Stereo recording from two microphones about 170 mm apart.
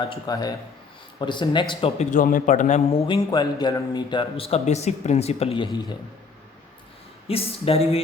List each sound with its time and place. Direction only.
0.3 s speech: 20° left (ahead or behind)
2.0 s a man's voice: 50° left (ahead or behind)
3.1 s a man's voice: 25° left (ahead or behind)
7.3 s a man's voice: 35° left (ahead or behind)